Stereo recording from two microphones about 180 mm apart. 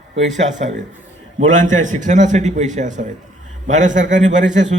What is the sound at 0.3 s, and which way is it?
A man's voice, 45° right (ahead or behind).